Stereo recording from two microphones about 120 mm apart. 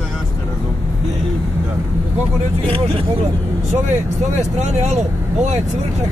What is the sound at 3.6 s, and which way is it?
Speech, 75° right (ahead or behind).